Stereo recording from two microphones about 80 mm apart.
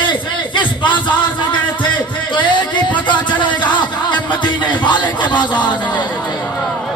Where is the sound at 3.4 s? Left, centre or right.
Left.